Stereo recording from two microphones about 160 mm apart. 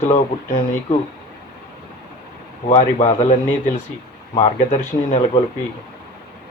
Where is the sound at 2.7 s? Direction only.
45° left (ahead or behind).